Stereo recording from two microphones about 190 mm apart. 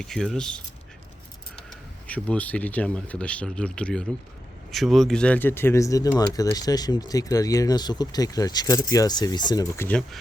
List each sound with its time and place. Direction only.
0.0 s speech: 5° left (ahead or behind)
1.7 s speech: 5° left (ahead or behind)